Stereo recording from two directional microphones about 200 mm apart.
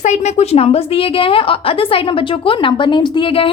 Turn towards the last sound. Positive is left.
turn(degrees=25)  # may be behind; listen again after turning